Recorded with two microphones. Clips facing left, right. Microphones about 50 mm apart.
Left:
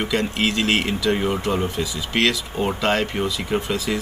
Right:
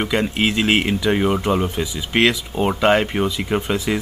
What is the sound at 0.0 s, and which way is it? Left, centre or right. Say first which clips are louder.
Speech: right 2 dB; centre.